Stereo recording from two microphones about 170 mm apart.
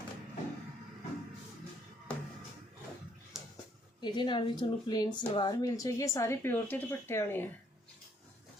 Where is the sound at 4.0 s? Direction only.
25° left (ahead or behind).